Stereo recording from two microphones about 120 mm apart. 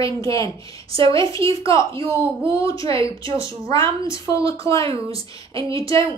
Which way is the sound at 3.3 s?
25° left (ahead or behind).